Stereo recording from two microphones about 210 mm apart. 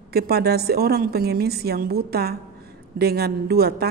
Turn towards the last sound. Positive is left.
turn(degrees=-50)  # may be behind; listen again after turning